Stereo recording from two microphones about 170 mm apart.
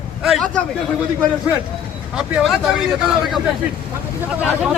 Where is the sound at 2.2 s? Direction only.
5° right (ahead or behind).